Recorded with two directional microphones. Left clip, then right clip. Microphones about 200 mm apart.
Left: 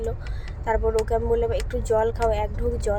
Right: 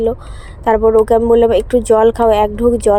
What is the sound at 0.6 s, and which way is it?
Speech, 40° right (ahead or behind).